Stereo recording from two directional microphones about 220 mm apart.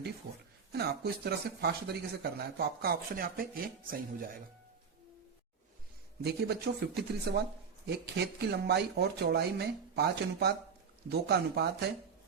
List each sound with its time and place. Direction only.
0.7 s speech: 45° right (ahead or behind)
6.2 s speech: 50° right (ahead or behind)